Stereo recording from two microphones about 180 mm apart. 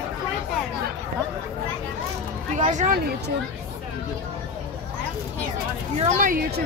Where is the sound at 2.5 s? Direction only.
45° right (ahead or behind).